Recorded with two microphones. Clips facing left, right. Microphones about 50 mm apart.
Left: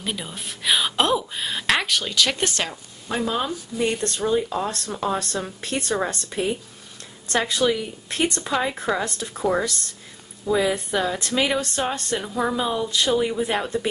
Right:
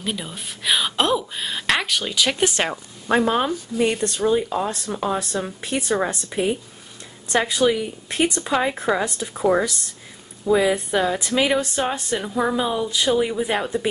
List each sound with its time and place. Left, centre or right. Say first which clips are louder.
0.0 s a woman's voice: right 2 dB; centre
2.7 s a woman's voice: right 8 dB; right
3.3 s speech: right 4 dB; right
3.8 s speech: right 3 dB; centre